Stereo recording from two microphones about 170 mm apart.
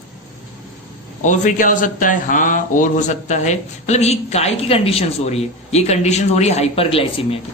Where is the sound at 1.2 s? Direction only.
50° left (ahead or behind).